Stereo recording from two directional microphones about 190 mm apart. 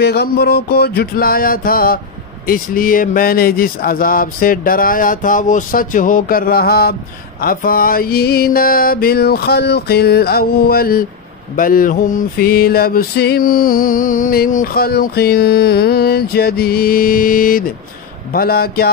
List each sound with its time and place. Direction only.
0.0 s music: 55° left (ahead or behind)
2.4 s speech: 45° left (ahead or behind)